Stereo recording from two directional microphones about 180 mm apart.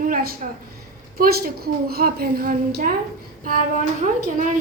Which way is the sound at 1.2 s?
55° right (ahead or behind).